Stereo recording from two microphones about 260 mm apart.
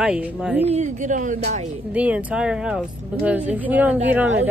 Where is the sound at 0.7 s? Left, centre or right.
Right.